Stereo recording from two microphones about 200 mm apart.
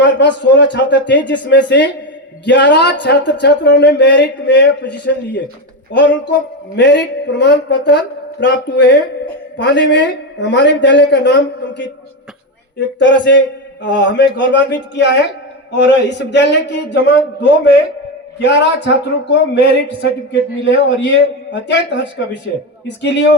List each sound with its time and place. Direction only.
0.0 s speech: 60° left (ahead or behind)
13.0 s speech: 65° left (ahead or behind)
18.3 s speech: 60° left (ahead or behind)